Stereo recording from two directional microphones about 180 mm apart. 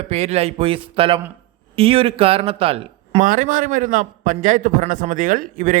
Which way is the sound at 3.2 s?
50° right (ahead or behind).